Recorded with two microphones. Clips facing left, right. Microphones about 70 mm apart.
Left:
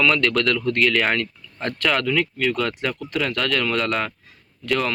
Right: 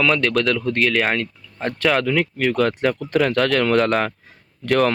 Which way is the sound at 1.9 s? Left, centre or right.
Right.